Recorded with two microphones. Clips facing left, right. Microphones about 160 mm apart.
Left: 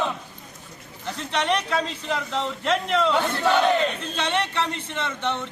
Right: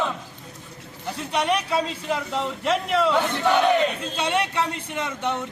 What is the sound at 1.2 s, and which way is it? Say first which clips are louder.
A man's voice: right 1 dB; 10° right (ahead or behind).